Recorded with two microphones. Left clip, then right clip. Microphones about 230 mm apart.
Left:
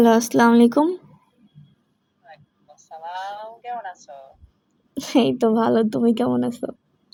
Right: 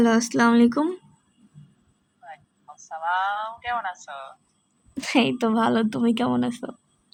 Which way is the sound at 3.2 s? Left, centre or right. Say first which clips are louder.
Right 6 dB; centre.